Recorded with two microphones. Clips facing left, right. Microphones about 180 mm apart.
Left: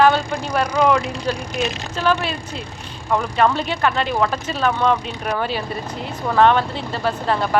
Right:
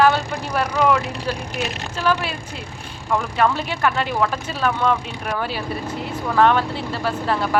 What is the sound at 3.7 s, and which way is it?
Speech, 10° right (ahead or behind).